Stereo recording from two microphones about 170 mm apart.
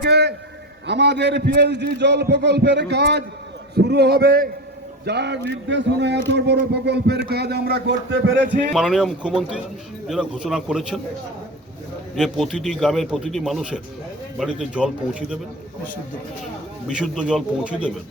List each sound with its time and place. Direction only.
0.0 s a man's voice: 80° right; by 4.4 s 60° right (ahead or behind)
5.0 s speech: 80° right
8.7 s a man's voice: centre (ahead or behind)
12.1 s a man's voice: centre (ahead or behind)
17.0 s speech: 5° right (ahead or behind)